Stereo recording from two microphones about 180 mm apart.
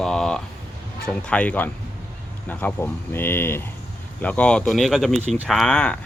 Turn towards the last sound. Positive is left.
turn(degrees=5)  # may be behind; listen again after turning